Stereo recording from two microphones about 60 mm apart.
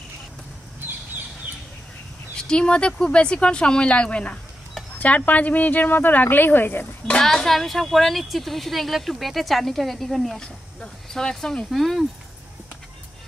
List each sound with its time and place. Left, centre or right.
2.3 s speech: centre; by 6.9 s left
7.1 s speech: centre
11.7 s speech: centre